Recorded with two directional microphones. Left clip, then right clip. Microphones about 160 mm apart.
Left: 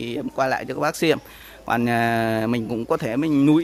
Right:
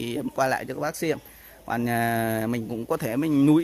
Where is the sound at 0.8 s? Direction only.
10° left (ahead or behind).